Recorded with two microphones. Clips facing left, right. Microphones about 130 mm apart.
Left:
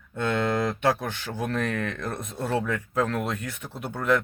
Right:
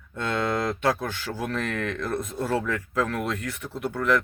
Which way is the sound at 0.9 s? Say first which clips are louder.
Even; 25° left (ahead or behind).